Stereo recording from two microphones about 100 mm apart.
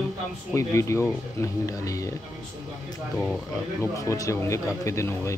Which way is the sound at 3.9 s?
30° left (ahead or behind).